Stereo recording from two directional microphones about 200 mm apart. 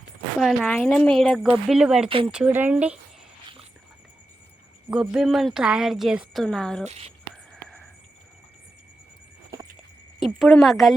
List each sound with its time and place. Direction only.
0.3 s speech: centre (ahead or behind)
4.9 s speech: 5° right (ahead or behind)
6.8 s speech: 30° right (ahead or behind)
10.2 s speech: centre (ahead or behind)